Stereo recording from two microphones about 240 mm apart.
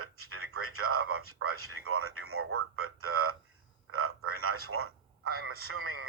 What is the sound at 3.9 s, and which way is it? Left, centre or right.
Frog, right.